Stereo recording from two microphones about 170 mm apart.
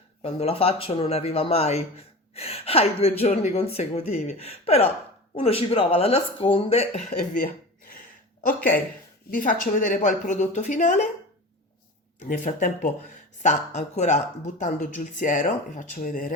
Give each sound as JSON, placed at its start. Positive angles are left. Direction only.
{"t": 0.2, "sound": "speech", "side_deg": 35}
{"t": 9.3, "sound": "speech", "side_deg": 55}
{"t": 12.3, "sound": "speech", "side_deg": 50}